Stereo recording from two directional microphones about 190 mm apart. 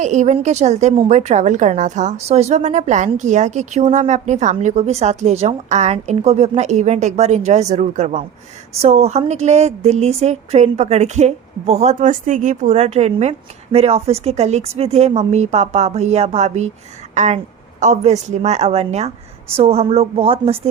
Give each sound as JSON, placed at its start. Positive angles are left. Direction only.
{"t": 0.0, "sound": "a woman's voice", "side_deg": -40}